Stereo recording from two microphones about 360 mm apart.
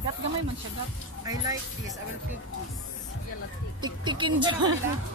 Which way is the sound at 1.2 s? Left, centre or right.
Centre.